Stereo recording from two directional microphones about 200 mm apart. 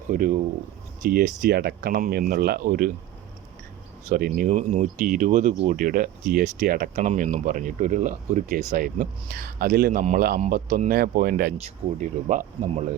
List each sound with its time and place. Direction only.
0.1 s speech: 40° right (ahead or behind)
4.1 s speech: 45° right (ahead or behind)
4.5 s speech: 35° right (ahead or behind)
11.5 s speech: 35° right (ahead or behind)